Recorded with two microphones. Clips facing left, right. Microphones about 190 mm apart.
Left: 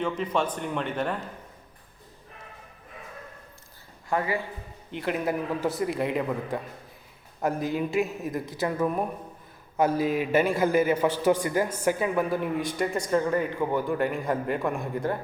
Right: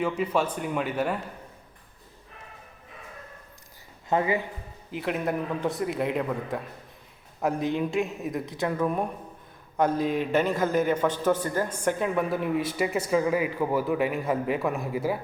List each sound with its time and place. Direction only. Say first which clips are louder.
0.0 s speech: right 1 dB; 10° right (ahead or behind)
4.1 s speech: right 3 dB; 20° right (ahead or behind)
4.9 s a man's voice: even; centre (ahead or behind)